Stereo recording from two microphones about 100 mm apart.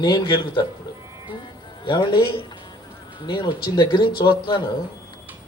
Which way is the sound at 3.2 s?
50° left (ahead or behind).